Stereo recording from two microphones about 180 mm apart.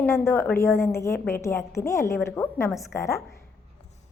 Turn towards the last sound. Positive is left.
turn(degrees=15)  # may be behind; listen again after turning